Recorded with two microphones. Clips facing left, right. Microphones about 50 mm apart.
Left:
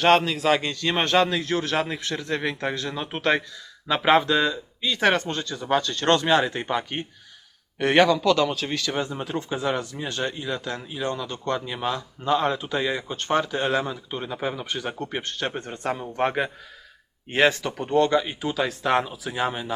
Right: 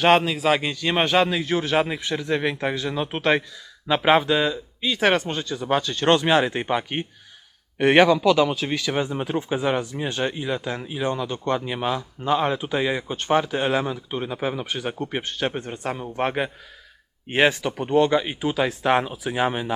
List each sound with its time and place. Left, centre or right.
0.0 s speech: centre